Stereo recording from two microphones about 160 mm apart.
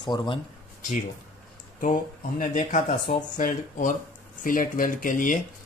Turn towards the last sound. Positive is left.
turn(degrees=55)  # may be behind; listen again after turning